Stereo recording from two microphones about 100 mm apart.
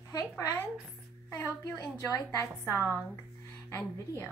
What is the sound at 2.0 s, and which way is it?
A woman's voice, 30° left (ahead or behind).